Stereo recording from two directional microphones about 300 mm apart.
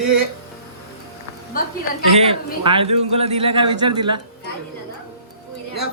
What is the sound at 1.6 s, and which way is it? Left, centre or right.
Speech, left.